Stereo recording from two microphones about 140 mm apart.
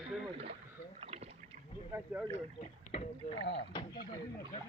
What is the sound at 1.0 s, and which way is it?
Rowboat, 50° right (ahead or behind).